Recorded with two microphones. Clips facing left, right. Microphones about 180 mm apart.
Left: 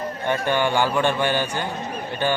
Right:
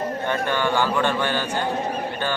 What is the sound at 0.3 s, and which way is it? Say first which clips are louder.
Speech: left 3 dB; 15° left (ahead or behind).